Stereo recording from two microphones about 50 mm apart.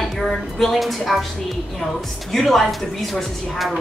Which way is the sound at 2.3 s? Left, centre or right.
Centre.